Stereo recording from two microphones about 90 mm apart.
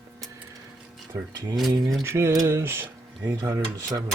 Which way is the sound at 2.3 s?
40° right (ahead or behind).